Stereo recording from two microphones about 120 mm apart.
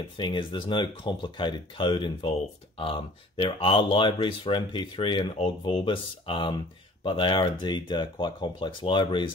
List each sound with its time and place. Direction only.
0.2 s speech: 40° left (ahead or behind)